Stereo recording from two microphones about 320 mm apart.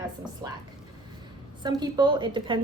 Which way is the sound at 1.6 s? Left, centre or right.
Centre.